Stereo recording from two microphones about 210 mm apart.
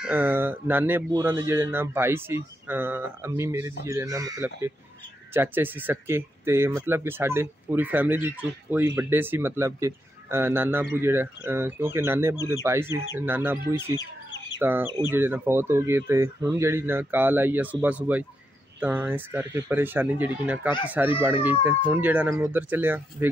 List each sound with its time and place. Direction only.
0.0 s speech: 10° right (ahead or behind)